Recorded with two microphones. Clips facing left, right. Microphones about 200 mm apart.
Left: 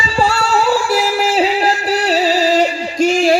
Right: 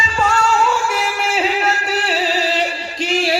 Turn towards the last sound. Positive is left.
turn(degrees=45)  # may be behind; listen again after turning